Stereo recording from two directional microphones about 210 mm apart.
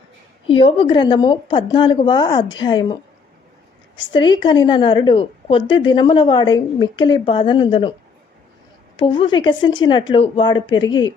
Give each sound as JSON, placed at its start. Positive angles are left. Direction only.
{"t": 0.6, "sound": "a woman's voice", "side_deg": 25}
{"t": 4.1, "sound": "a woman's voice", "side_deg": 20}
{"t": 9.0, "sound": "a woman's voice", "side_deg": 25}